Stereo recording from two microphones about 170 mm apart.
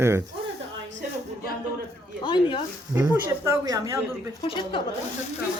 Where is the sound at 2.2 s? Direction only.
30° left (ahead or behind).